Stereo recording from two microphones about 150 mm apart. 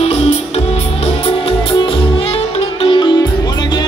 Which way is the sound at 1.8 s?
35° left (ahead or behind).